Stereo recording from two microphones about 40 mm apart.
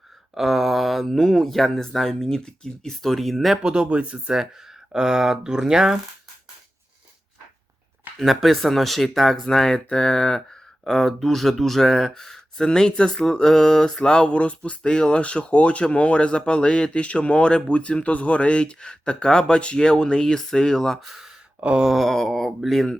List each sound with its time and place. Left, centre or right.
0.3 s speech: centre
3.6 s speech: right
4.9 s speech: centre
8.2 s speech: centre
9.5 s speech: centre
21.0 s speech: centre
21.6 s a sound: right
21.8 s speech: centre